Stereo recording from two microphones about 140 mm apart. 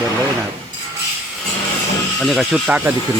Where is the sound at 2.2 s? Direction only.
Centre (ahead or behind).